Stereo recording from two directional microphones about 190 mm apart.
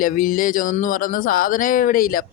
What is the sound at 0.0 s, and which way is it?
Speech, 45° left (ahead or behind).